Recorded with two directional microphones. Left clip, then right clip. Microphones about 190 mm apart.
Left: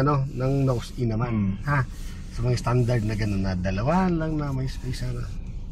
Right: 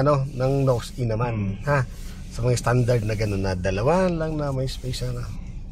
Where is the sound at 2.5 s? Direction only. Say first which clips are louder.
Right 4 dB; 25° right (ahead or behind).